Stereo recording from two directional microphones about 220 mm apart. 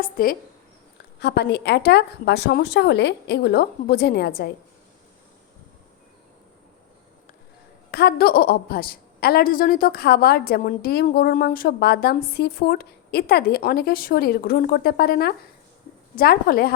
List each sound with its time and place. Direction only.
0.0 s a woman's voice: 40° left (ahead or behind)
7.9 s a woman's voice: 45° left (ahead or behind)